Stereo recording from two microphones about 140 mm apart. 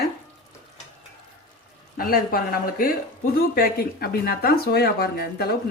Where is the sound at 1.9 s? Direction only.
90° left.